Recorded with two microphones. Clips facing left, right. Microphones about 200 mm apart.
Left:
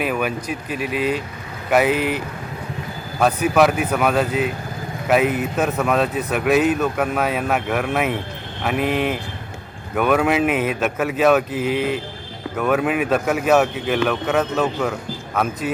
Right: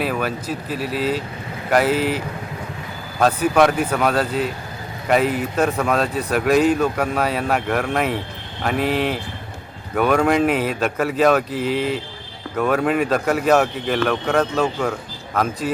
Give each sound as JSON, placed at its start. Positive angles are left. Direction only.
{"t": 0.1, "sound": "speech", "side_deg": 10}
{"t": 0.7, "sound": "speech", "side_deg": 55}
{"t": 3.2, "sound": "speech", "side_deg": 5}
{"t": 11.5, "sound": "speech", "side_deg": 50}
{"t": 12.5, "sound": "speech", "side_deg": 5}